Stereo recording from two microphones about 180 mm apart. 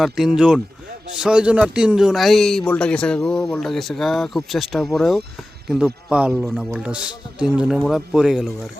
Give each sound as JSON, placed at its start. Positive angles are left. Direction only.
{"t": 0.0, "sound": "a man's voice", "side_deg": 0}